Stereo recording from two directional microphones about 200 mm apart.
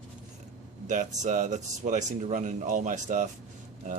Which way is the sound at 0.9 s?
40° right (ahead or behind).